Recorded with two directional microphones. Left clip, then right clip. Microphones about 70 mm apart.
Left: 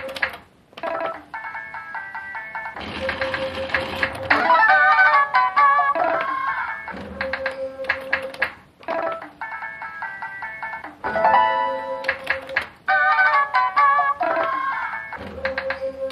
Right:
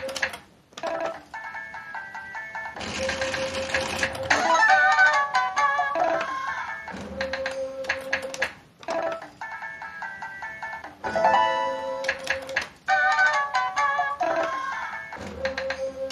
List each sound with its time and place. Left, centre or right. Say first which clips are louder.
0.2 s telephone: left 5 dB; right
3.1 s music: left 4 dB; right
10.6 s music: left 4 dB; right